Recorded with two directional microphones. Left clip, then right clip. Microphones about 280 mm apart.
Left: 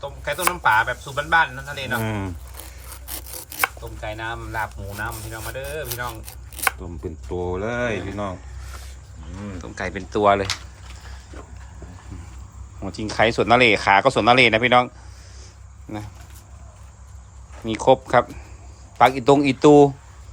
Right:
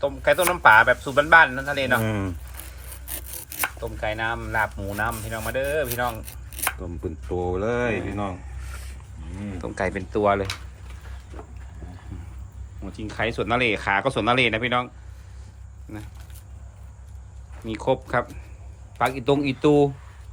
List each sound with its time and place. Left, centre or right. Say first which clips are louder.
0.0 s speech: right 4 dB; centre
2.9 s chopping: left 3 dB; centre
9.6 s speech: right 3 dB; centre
12.8 s speech: left 8 dB; centre
17.7 s speech: left 7 dB; centre